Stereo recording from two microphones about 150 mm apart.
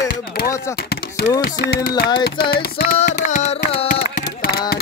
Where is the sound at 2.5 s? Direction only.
90° left.